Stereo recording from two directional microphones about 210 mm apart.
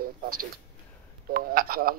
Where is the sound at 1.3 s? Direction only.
45° right (ahead or behind).